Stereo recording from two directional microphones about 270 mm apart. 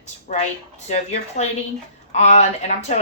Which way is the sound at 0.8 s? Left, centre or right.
Left.